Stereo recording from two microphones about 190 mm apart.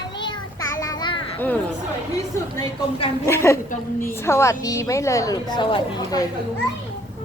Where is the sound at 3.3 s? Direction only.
15° left (ahead or behind).